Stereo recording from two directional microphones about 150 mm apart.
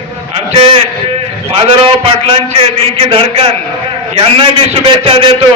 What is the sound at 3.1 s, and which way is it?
A man's voice, 35° right (ahead or behind).